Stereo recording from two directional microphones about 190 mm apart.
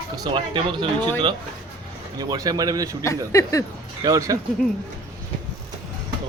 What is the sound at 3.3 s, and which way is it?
Speech, 15° left (ahead or behind).